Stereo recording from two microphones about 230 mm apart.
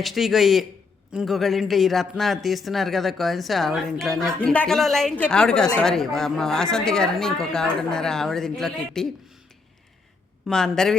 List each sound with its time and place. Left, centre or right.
0.0 s speech: centre
10.4 s speech: centre